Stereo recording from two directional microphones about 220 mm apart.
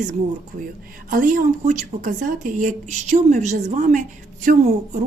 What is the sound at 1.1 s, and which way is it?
Speech, 35° right (ahead or behind).